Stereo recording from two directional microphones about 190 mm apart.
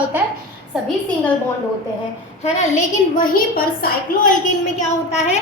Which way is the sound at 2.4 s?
35° left (ahead or behind).